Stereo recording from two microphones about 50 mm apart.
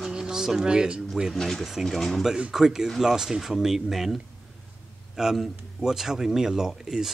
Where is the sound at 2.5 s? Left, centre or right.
Centre.